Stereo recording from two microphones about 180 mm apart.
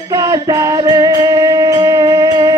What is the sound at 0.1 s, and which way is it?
Music, 20° right (ahead or behind).